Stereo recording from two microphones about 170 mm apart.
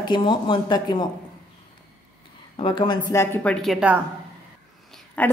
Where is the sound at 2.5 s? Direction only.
30° left (ahead or behind); by 4.0 s 5° right (ahead or behind).